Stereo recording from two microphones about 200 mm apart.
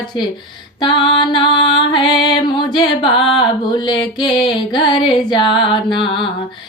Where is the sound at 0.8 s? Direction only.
25° left (ahead or behind).